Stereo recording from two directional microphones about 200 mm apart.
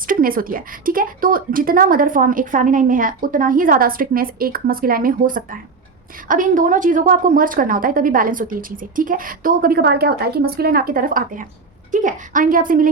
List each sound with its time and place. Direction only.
0.1 s a woman's voice: 45° right (ahead or behind)